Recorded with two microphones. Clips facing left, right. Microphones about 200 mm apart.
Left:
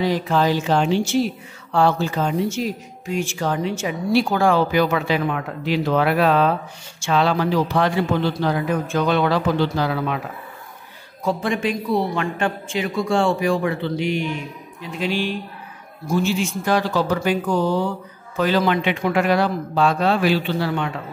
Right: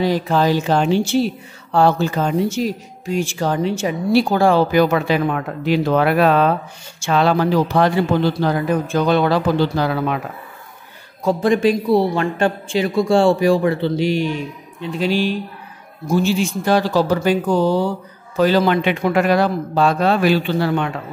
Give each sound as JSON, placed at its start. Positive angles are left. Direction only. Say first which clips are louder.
{"t": 0.0, "sound": "a woman's voice", "louder": "right 2 dB", "side_deg": -35}
{"t": 4.6, "sound": "a woman's voice", "louder": "right 4 dB", "side_deg": -45}
{"t": 11.2, "sound": "a woman's voice", "louder": "right 6 dB", "side_deg": -40}